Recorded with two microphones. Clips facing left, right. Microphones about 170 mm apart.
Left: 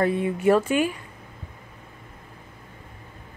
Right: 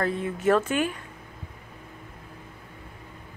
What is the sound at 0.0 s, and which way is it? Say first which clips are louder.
Speech: left 4 dB; 15° left (ahead or behind).